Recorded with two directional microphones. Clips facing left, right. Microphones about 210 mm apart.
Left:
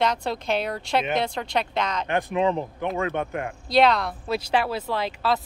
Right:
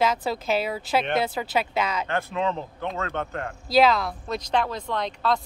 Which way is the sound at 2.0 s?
15° left (ahead or behind).